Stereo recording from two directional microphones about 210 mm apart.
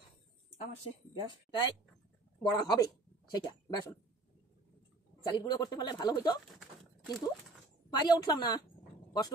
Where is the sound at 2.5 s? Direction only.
20° left (ahead or behind).